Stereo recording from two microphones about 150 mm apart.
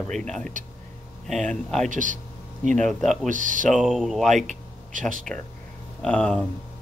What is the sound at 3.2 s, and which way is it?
Speech, 60° right (ahead or behind).